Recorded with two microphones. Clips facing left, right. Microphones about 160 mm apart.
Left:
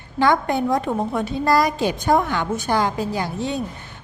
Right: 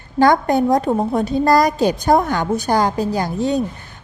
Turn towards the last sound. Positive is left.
turn(degrees=-40)  # may be behind; listen again after turning